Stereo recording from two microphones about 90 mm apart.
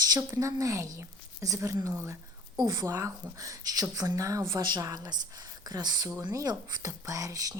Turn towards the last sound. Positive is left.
turn(degrees=-40)  # may be behind; listen again after turning